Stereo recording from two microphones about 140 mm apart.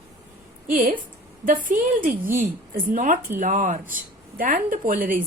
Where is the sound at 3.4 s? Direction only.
60° right (ahead or behind).